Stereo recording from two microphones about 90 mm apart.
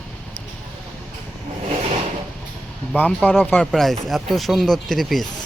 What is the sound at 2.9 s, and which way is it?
Speech, 20° left (ahead or behind).